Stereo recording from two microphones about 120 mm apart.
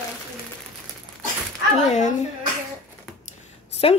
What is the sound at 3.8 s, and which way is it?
Speech, 50° left (ahead or behind).